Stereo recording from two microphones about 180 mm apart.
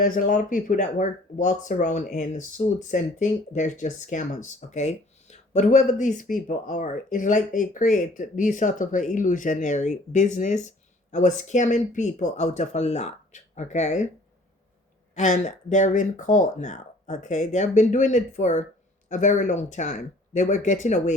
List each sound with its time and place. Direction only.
0.0 s speech: 50° left (ahead or behind)
15.1 s speech: 40° left (ahead or behind)